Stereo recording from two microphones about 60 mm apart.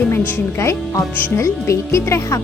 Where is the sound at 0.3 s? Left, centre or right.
Left.